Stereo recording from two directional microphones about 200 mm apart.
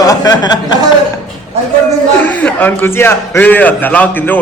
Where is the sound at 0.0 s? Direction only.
20° left (ahead or behind).